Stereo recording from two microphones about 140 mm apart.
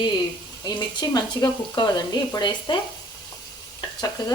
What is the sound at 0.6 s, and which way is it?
Speech, 30° left (ahead or behind).